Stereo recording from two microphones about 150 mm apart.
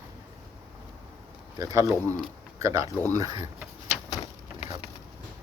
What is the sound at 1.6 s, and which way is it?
Speech, 25° right (ahead or behind).